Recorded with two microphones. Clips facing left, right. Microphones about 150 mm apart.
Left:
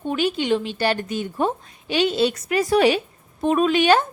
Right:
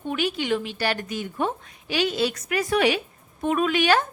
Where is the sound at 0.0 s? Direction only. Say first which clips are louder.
Left 4 dB; 30° left (ahead or behind).